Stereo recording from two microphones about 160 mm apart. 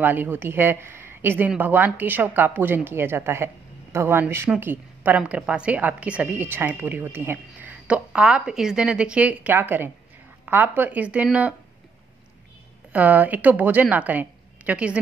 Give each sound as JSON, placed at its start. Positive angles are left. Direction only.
{"t": 0.0, "sound": "a woman's voice", "side_deg": -10}
{"t": 12.9, "sound": "a woman's voice", "side_deg": -10}